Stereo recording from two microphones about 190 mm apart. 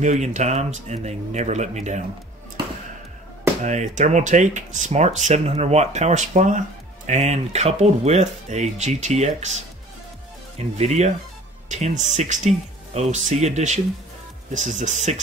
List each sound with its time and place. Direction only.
0.0 s speech: 40° right (ahead or behind)
3.6 s speech: 40° right (ahead or behind)
10.8 s speech: 35° right (ahead or behind)